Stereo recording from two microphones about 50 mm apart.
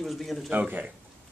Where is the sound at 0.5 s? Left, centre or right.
Right.